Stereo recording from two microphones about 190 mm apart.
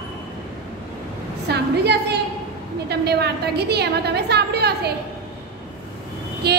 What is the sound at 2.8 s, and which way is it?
A woman's voice, 60° right (ahead or behind).